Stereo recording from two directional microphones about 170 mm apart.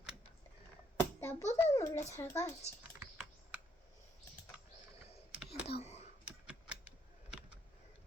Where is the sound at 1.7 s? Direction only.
15° left (ahead or behind).